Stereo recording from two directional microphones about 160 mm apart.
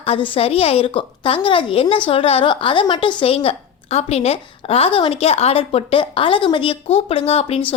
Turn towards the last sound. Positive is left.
turn(degrees=35)  # may be behind; listen again after turning